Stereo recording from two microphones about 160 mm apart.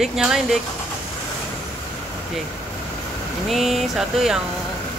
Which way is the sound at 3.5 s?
Centre (ahead or behind).